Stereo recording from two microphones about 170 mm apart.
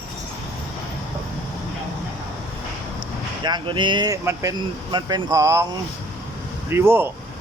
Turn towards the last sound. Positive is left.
turn(degrees=-15)  # may be behind; listen again after turning